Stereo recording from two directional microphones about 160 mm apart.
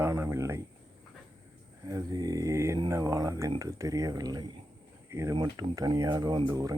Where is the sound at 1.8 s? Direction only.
20° right (ahead or behind).